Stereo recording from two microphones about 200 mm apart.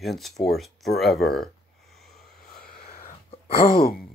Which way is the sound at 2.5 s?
40° left (ahead or behind).